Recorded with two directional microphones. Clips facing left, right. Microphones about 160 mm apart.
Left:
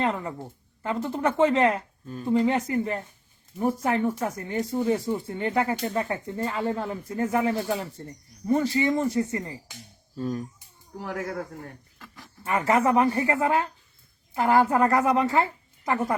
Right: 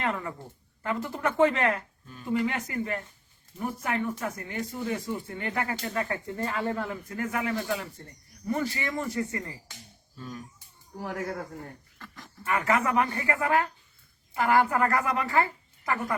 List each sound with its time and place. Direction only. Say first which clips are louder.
0.0 s speech: left 4 dB; 25° left (ahead or behind)
2.0 s speech: left 9 dB; 40° left (ahead or behind)
2.3 s speech: left 6 dB; 25° left (ahead or behind)
10.2 s speech: left 11 dB; 40° left (ahead or behind)
11.9 s a sound: right 1 dB; 5° left (ahead or behind)
12.5 s speech: left 4 dB; 30° left (ahead or behind)